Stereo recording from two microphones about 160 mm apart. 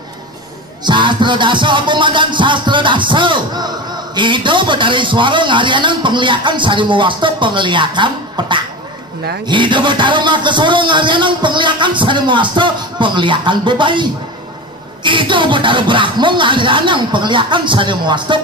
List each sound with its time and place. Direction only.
0.8 s music: 30° right (ahead or behind)
15.0 s music: 30° right (ahead or behind)